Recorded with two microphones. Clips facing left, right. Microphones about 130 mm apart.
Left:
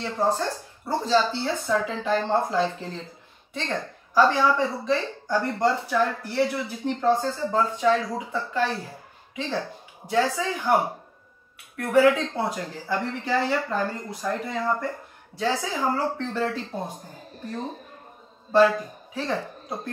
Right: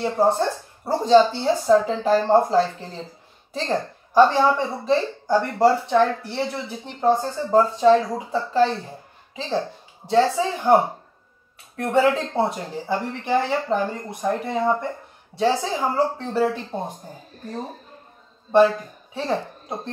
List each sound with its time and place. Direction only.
0.0 s a woman's voice: 25° right (ahead or behind)
0.8 s a woman's voice: 40° right (ahead or behind)
16.4 s speech: 20° right (ahead or behind)
19.1 s speech: 25° right (ahead or behind)